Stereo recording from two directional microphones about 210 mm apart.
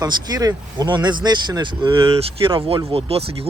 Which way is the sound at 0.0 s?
20° right (ahead or behind).